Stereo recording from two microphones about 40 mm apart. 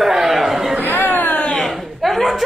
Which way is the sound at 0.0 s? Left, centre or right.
Centre.